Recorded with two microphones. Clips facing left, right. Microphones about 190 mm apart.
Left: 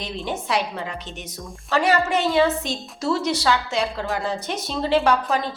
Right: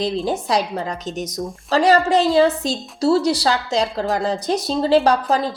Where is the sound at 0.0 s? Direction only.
35° right (ahead or behind).